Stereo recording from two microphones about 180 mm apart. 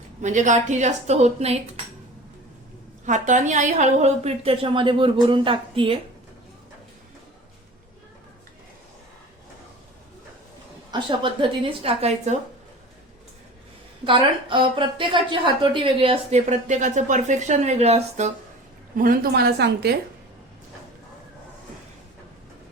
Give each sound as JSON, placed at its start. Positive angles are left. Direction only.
{"t": 0.2, "sound": "a woman's voice", "side_deg": -40}
{"t": 3.1, "sound": "a woman's voice", "side_deg": -45}
{"t": 10.9, "sound": "a woman's voice", "side_deg": -25}
{"t": 14.0, "sound": "a woman's voice", "side_deg": -25}
{"t": 16.5, "sound": "a woman's voice", "side_deg": -40}
{"t": 18.9, "sound": "a woman's voice", "side_deg": -50}